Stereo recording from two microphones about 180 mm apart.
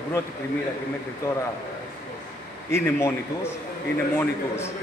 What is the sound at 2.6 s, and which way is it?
Speech, 15° left (ahead or behind).